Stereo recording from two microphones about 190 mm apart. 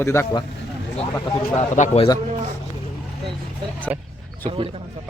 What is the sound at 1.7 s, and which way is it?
Speech, 40° left (ahead or behind).